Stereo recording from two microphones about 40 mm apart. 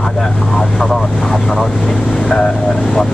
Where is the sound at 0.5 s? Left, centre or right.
Centre.